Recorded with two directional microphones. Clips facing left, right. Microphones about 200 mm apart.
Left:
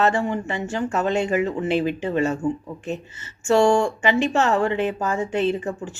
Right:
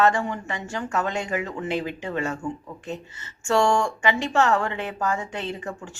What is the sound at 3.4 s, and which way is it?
Speech, 20° left (ahead or behind).